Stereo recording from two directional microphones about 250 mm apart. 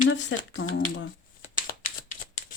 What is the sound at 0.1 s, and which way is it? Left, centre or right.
Speech, left.